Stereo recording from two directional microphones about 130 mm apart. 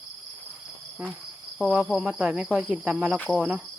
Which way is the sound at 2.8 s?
10° right (ahead or behind).